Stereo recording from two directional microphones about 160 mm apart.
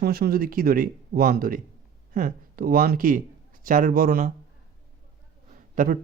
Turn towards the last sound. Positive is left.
turn(degrees=-60)  # may be behind; listen again after turning